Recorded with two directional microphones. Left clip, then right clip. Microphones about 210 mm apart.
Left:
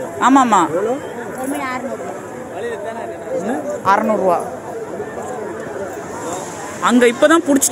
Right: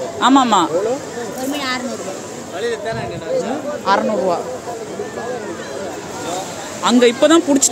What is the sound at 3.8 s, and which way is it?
Speech, centre (ahead or behind).